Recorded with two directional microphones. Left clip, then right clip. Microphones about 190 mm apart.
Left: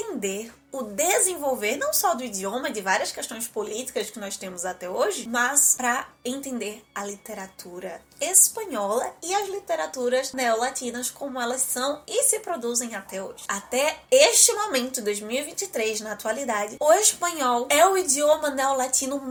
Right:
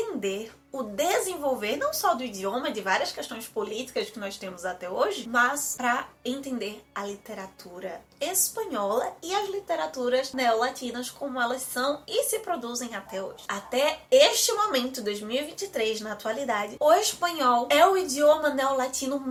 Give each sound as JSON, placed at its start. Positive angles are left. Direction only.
{"t": 0.9, "sound": "a woman's voice", "side_deg": 40}